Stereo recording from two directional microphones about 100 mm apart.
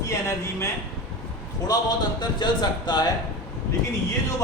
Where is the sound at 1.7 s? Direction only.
40° left (ahead or behind).